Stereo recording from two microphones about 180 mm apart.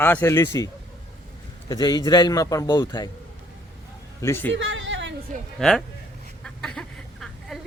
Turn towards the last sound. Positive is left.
turn(degrees=0)  # may be behind; listen again after turning